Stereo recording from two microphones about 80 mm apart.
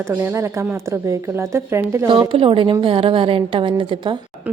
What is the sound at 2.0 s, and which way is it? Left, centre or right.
A woman's voice, right.